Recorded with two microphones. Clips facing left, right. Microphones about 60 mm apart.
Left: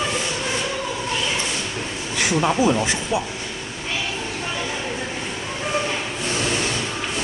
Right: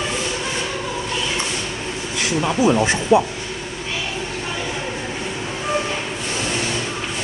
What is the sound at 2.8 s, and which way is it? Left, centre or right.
Speech, right.